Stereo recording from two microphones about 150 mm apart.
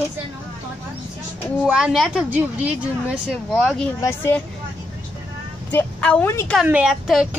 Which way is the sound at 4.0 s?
15° left (ahead or behind).